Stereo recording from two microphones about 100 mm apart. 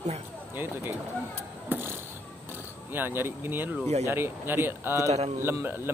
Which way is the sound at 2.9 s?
20° right (ahead or behind).